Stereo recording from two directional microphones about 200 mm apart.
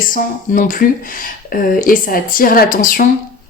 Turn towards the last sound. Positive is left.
turn(degrees=45)  # may be behind; listen again after turning